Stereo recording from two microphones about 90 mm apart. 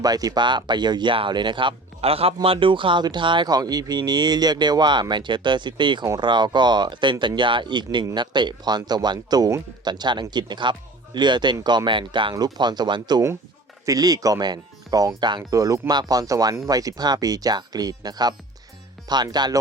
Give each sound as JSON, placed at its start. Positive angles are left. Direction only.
{"t": 0.0, "sound": "speech", "side_deg": -45}
{"t": 0.4, "sound": "a man's voice", "side_deg": -55}
{"t": 3.5, "sound": "a man's voice", "side_deg": -45}
{"t": 11.9, "sound": "a man's voice", "side_deg": -65}
{"t": 12.5, "sound": "speech", "side_deg": -55}